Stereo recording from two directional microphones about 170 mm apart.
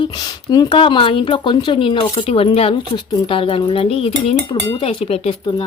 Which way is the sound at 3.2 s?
30° left (ahead or behind).